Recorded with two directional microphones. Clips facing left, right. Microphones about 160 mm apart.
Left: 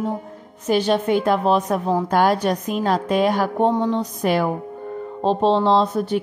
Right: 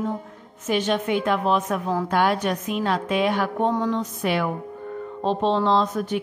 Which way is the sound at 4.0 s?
40° left (ahead or behind).